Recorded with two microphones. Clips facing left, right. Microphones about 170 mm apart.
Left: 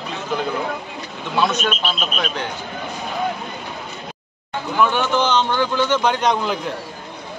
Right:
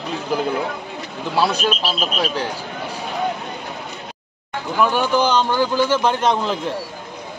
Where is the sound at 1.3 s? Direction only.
35° right (ahead or behind).